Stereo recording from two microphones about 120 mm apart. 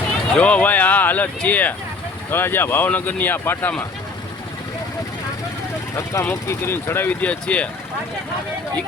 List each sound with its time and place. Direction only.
0.3 s speech: 10° left (ahead or behind)
6.0 s speech: 25° left (ahead or behind)